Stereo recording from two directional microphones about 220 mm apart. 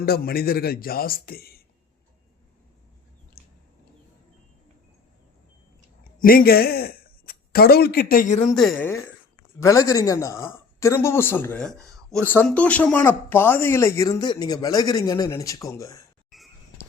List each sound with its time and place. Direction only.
0.0 s speech: 45° left (ahead or behind)
3.4 s a sound: 45° left (ahead or behind)
6.1 s speech: 40° left (ahead or behind)
8.5 s a woman's voice: centre (ahead or behind)
9.6 s speech: 15° left (ahead or behind)
16.3 s a sound: centre (ahead or behind)